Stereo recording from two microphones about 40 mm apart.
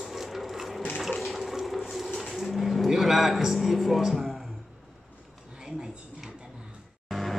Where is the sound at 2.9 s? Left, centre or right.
Centre.